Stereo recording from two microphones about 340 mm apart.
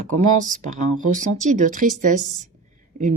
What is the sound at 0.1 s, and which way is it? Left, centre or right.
Speech, right.